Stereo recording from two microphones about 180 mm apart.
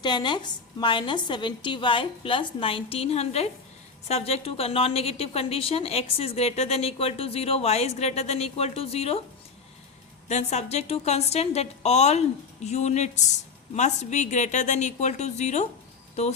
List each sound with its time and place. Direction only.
0.0 s a woman's voice: 25° left (ahead or behind)
10.2 s a woman's voice: 40° left (ahead or behind)